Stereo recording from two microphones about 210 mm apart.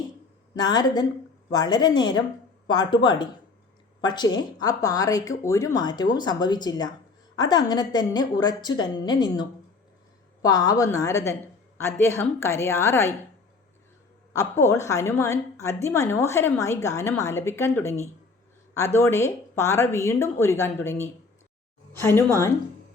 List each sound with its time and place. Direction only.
0.5 s a woman's voice: 20° left (ahead or behind)
14.6 s a woman's voice: 15° left (ahead or behind)